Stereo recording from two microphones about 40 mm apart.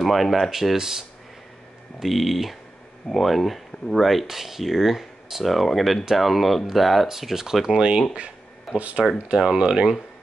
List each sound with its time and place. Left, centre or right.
0.0 s speech: centre
2.0 s speech: centre
7.6 s speech: right
8.7 s speech: right
9.6 s speech: centre